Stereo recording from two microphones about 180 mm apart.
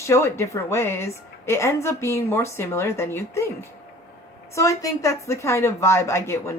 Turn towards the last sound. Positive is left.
turn(degrees=15)  # may be behind; listen again after turning